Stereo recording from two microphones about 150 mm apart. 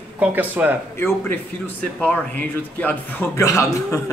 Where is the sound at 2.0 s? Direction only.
10° left (ahead or behind).